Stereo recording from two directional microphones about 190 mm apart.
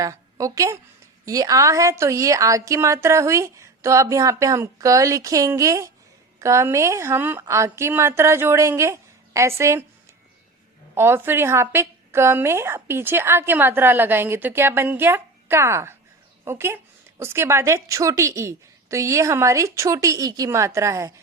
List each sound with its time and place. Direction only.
0.0 s a woman's voice: 15° right (ahead or behind)
10.9 s a woman's voice: 10° right (ahead or behind)